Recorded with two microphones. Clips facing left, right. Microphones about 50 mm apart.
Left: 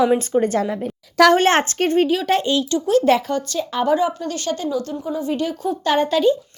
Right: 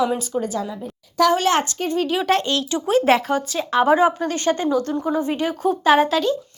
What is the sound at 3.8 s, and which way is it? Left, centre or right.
Speech, right.